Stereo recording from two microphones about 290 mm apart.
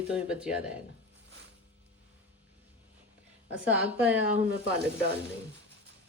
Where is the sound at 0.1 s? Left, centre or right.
Centre.